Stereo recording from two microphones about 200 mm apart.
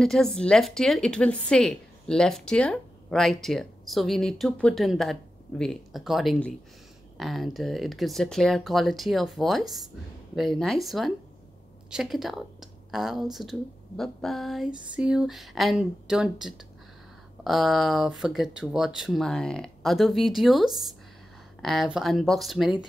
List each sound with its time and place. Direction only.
0.0 s a woman's voice: centre (ahead or behind)